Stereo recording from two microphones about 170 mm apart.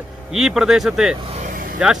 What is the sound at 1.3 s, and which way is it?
Vehicle, 50° right (ahead or behind).